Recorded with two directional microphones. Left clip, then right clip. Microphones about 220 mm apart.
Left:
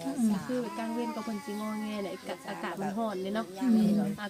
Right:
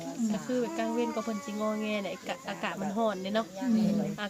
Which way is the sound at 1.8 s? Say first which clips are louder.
Right 3 dB; 40° right (ahead or behind).